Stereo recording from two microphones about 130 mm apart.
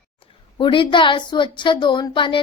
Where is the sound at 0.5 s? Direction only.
40° left (ahead or behind).